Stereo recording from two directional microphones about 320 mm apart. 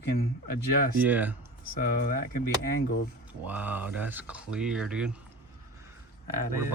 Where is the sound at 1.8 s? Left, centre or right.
Left.